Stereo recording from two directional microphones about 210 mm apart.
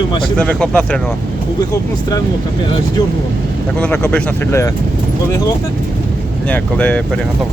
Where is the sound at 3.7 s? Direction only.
5° left (ahead or behind).